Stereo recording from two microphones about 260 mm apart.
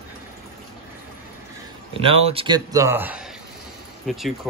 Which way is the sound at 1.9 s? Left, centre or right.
Right.